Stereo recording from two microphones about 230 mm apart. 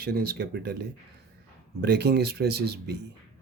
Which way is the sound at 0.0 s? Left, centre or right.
Right.